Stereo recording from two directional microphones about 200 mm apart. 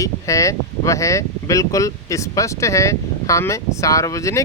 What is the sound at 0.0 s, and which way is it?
Speech, 15° left (ahead or behind).